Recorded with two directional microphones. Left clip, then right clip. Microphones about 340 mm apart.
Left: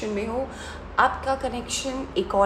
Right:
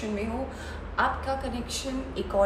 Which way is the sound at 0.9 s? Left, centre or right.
Centre.